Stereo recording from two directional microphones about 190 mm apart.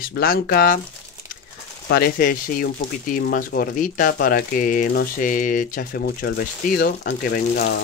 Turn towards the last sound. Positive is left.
turn(degrees=50)  # may be behind; listen again after turning